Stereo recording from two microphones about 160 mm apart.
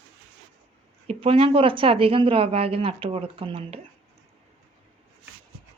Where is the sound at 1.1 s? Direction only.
35° right (ahead or behind).